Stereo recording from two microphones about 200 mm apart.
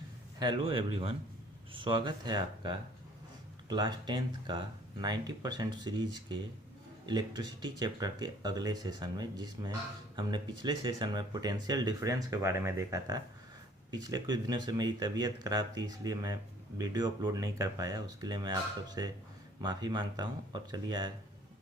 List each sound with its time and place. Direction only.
0.3 s speech: 25° right (ahead or behind)